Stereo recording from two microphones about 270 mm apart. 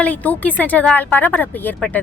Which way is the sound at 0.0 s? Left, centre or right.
Centre.